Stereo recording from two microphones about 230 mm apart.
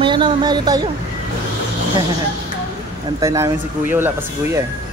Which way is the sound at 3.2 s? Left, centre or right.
Centre.